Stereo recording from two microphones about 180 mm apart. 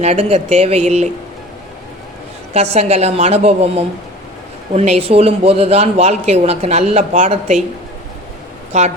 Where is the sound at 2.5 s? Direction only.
35° right (ahead or behind).